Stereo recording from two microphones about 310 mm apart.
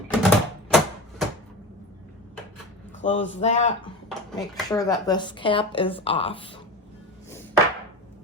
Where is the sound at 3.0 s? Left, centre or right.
Left.